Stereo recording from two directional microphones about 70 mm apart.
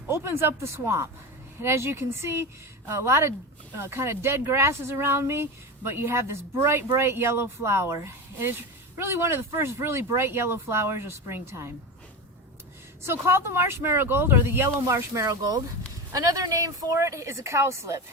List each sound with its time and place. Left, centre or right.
0.1 s speech: right
13.1 s speech: right
14.8 s speech: right